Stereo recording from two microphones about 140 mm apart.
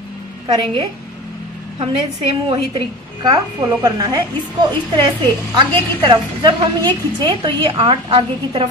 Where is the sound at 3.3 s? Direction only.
30° right (ahead or behind).